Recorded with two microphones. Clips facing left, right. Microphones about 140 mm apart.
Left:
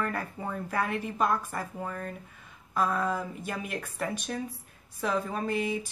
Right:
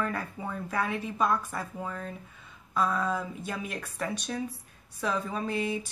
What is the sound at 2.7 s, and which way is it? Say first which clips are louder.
Speech: even; 45° left (ahead or behind).